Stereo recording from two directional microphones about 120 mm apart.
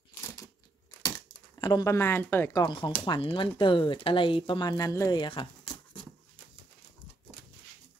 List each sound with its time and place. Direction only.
1.0 s a sound: 35° left (ahead or behind)
2.0 s speech: 20° left (ahead or behind)
2.5 s speech: 35° left (ahead or behind)
5.1 s speech: 40° left (ahead or behind)